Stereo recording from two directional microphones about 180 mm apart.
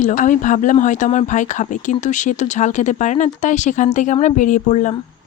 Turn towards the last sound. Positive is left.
turn(degrees=40)  # may be behind; listen again after turning